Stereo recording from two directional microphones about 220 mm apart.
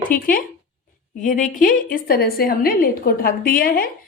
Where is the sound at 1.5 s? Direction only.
40° left (ahead or behind).